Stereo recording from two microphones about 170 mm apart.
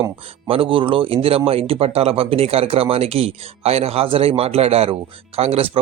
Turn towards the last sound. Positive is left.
turn(degrees=-35)  # may be behind; listen again after turning